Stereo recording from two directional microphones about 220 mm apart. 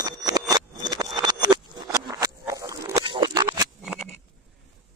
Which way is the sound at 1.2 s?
20° right (ahead or behind).